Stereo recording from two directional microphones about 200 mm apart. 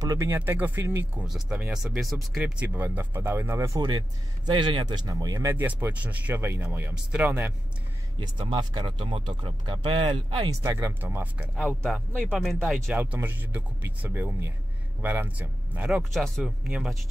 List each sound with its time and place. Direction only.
0.0 s speech: 15° right (ahead or behind)
8.2 s speech: 25° right (ahead or behind)
11.6 s speech: 5° left (ahead or behind)